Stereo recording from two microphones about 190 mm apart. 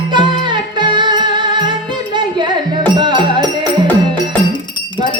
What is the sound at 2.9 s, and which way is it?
Music, 25° right (ahead or behind).